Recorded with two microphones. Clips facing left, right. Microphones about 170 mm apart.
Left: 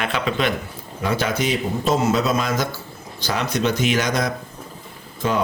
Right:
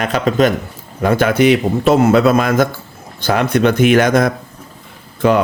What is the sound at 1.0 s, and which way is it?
Speech, 55° right (ahead or behind).